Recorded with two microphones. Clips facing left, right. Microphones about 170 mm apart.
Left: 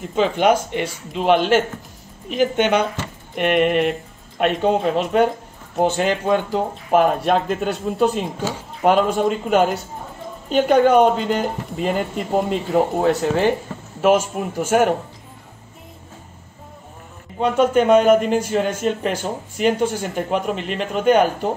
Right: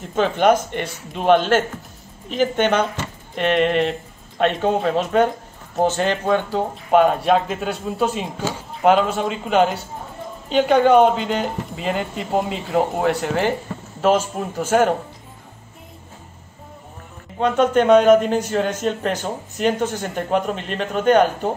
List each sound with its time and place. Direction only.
0.1 s a man's voice: 10° left (ahead or behind)
6.9 s speech: centre (ahead or behind)
10.5 s speech: 45° left (ahead or behind)
11.2 s speech: centre (ahead or behind)
13.0 s speech: 25° left (ahead or behind)
14.0 s a man's voice: 15° left (ahead or behind)
17.4 s a man's voice: 10° left (ahead or behind)